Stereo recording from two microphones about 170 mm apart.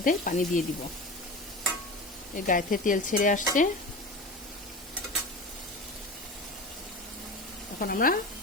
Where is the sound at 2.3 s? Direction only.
50° left (ahead or behind).